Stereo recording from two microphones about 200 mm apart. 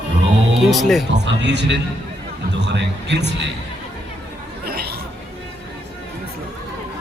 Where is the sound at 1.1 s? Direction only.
60° right (ahead or behind).